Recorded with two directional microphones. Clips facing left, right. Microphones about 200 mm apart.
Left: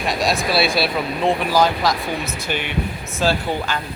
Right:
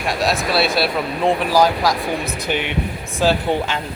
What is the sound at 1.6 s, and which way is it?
Speech, 10° right (ahead or behind).